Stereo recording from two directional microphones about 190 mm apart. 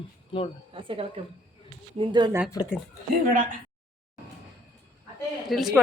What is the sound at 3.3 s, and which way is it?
Speech, 45° right (ahead or behind).